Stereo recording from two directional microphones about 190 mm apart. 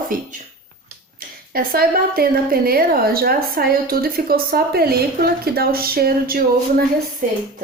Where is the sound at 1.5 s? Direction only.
50° right (ahead or behind).